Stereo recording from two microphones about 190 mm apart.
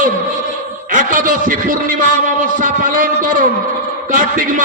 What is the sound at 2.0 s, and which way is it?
A man's voice, 45° right (ahead or behind).